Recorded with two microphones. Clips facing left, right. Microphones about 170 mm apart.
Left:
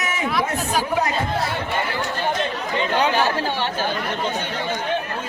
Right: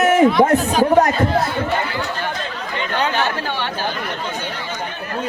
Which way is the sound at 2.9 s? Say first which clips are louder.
Even; 10° left (ahead or behind).